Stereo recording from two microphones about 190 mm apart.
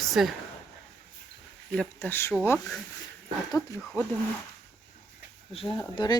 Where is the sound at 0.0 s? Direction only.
Centre (ahead or behind).